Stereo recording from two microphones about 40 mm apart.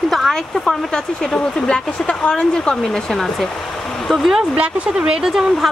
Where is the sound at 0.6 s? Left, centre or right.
Centre.